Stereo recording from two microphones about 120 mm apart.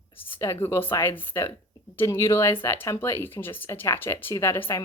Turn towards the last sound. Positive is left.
turn(degrees=20)  # may be behind; listen again after turning